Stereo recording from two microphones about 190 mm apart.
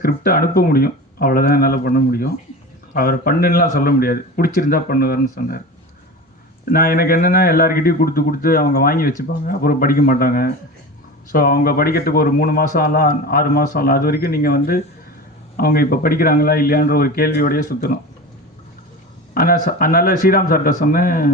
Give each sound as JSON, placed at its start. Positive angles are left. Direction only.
{"t": 0.0, "sound": "speech", "side_deg": 50}
{"t": 6.7, "sound": "speech", "side_deg": 50}
{"t": 19.3, "sound": "speech", "side_deg": 50}